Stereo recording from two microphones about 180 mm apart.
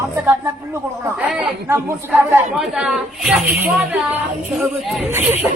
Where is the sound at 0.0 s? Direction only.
15° right (ahead or behind).